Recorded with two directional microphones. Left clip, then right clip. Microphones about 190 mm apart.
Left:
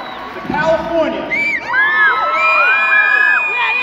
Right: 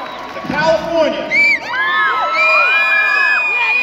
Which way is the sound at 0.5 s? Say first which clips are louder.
Right 1 dB; 35° right (ahead or behind).